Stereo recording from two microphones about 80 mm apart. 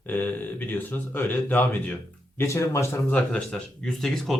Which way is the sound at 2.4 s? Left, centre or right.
Left.